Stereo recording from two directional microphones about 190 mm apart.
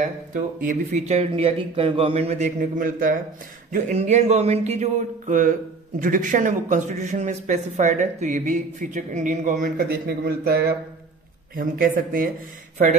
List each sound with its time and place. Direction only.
0.0 s a man's voice: 45° right (ahead or behind)